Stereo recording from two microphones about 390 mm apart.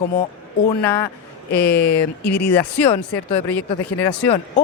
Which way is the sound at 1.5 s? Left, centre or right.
Left.